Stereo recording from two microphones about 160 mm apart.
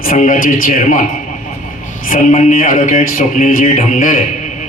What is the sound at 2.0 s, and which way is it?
A man's voice, 50° left (ahead or behind).